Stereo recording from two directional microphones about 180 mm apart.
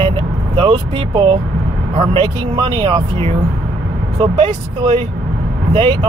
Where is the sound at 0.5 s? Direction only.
30° right (ahead or behind).